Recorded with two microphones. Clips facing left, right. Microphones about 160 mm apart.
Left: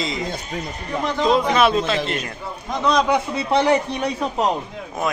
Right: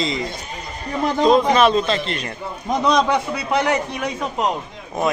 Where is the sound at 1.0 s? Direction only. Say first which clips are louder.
Right 4 dB; 40° right (ahead or behind).